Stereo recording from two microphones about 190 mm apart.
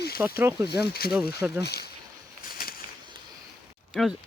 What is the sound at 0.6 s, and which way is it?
Speech, 60° left (ahead or behind).